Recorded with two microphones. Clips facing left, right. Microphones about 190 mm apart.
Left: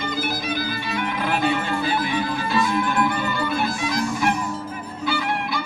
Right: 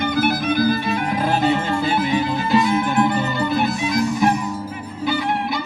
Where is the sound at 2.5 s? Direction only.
20° right (ahead or behind).